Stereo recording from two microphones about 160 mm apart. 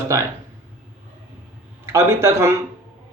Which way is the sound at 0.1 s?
20° right (ahead or behind).